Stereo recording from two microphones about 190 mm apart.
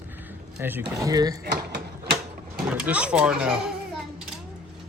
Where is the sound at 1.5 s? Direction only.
60° right (ahead or behind).